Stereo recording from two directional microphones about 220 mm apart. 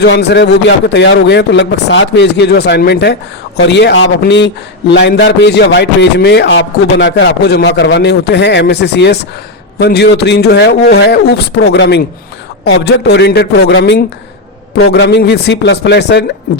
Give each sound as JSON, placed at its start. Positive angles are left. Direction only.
{"t": 0.0, "sound": "a man's voice", "side_deg": 50}